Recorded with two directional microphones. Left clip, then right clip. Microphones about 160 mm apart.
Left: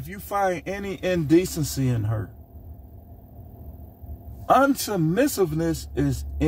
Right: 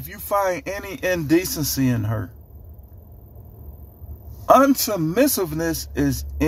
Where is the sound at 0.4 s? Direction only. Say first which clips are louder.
Even; 15° right (ahead or behind).